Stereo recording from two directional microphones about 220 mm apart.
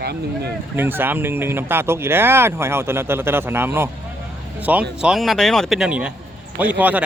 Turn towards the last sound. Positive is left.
turn(degrees=-5)  # may be behind; listen again after turning